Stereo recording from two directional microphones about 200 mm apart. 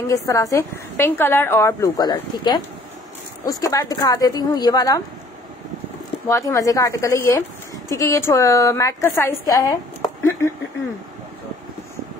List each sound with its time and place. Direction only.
0.1 s a woman's voice: 15° left (ahead or behind)
6.2 s a woman's voice: 15° left (ahead or behind)